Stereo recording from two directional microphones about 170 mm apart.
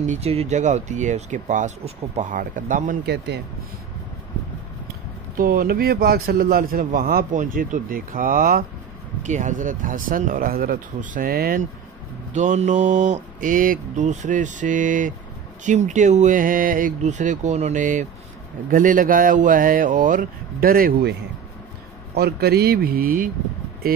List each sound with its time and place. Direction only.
0.0 s speech: 40° right (ahead or behind)
5.4 s a man's voice: 60° right (ahead or behind)
9.2 s speech: 45° right (ahead or behind); by 11.6 s 65° right (ahead or behind)
12.4 s a man's voice: 45° right (ahead or behind)